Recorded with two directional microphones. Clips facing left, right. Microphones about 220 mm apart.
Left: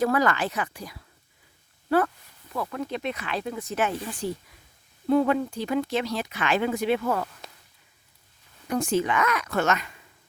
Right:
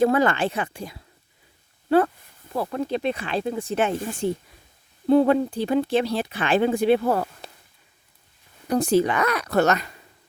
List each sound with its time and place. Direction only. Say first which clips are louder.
0.0 s speech: right 4 dB; 25° right (ahead or behind)
8.6 s speech: right 5 dB; 35° right (ahead or behind)